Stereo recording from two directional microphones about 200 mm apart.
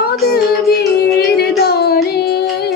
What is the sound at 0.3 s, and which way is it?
Music, 55° left (ahead or behind).